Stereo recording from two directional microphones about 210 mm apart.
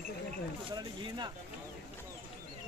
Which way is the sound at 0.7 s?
20° right (ahead or behind).